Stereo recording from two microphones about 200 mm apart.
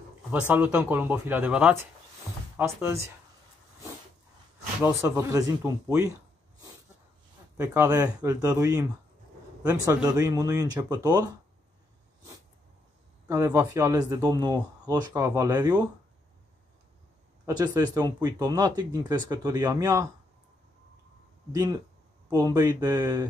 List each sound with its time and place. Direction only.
0.3 s speech: 10° right (ahead or behind)
4.8 s speech: 15° right (ahead or behind)
7.5 s speech: 10° right (ahead or behind)
9.8 s speech: 15° right (ahead or behind)
13.3 s speech: 15° right (ahead or behind)
17.5 s speech: 20° right (ahead or behind)
21.5 s speech: 20° right (ahead or behind)